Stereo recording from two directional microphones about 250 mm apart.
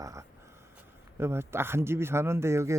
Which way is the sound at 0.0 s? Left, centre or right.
Centre.